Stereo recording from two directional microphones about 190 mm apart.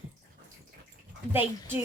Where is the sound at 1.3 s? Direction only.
10° right (ahead or behind).